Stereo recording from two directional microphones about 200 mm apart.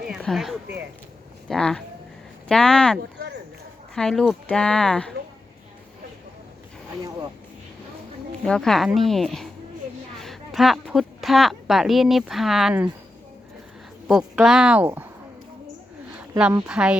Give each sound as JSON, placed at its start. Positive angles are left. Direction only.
{"t": 0.0, "sound": "speech", "side_deg": 0}
{"t": 3.0, "sound": "a sound", "side_deg": -60}
{"t": 3.9, "sound": "speech", "side_deg": 5}
{"t": 8.4, "sound": "speech", "side_deg": 0}
{"t": 14.1, "sound": "speech", "side_deg": 0}
{"t": 16.4, "sound": "speech", "side_deg": -5}